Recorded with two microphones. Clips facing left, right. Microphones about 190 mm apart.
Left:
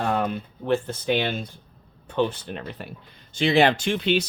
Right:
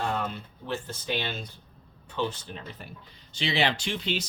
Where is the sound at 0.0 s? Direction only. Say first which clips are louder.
Left 6 dB; 60° left (ahead or behind).